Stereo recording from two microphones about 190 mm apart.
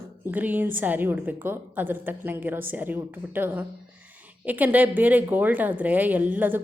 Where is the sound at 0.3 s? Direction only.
10° right (ahead or behind).